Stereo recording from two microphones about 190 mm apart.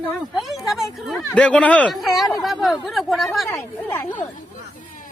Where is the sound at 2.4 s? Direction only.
Centre (ahead or behind).